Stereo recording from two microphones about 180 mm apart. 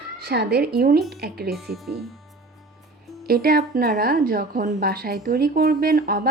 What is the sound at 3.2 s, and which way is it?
A woman's voice, 55° right (ahead or behind).